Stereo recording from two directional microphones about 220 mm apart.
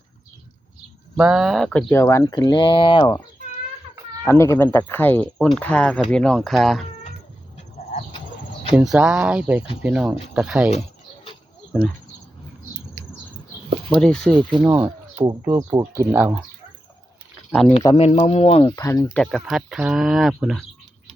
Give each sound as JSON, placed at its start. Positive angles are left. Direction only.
{"t": 1.1, "sound": "speech", "side_deg": -5}
{"t": 4.2, "sound": "speech", "side_deg": 10}
{"t": 8.7, "sound": "speech", "side_deg": -5}
{"t": 13.9, "sound": "speech", "side_deg": 5}
{"t": 14.7, "sound": "speech", "side_deg": -15}
{"t": 17.5, "sound": "speech", "side_deg": 0}
{"t": 17.9, "sound": "speech", "side_deg": 30}
{"t": 18.8, "sound": "speech", "side_deg": 15}
{"t": 19.2, "sound": "speech", "side_deg": 0}